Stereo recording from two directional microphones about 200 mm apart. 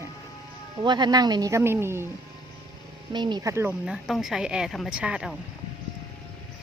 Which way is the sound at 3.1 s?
20° right (ahead or behind).